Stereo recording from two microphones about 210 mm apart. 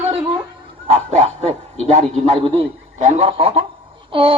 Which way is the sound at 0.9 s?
30° right (ahead or behind).